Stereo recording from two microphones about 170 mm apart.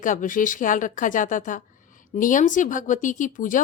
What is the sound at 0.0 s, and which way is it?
Speech, 50° left (ahead or behind).